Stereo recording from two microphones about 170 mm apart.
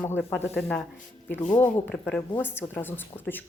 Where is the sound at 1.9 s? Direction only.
5° left (ahead or behind).